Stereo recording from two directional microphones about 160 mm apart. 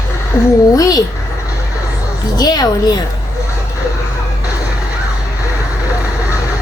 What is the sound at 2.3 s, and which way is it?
Speech, 25° left (ahead or behind).